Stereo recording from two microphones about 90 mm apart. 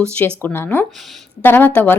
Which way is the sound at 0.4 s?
25° left (ahead or behind).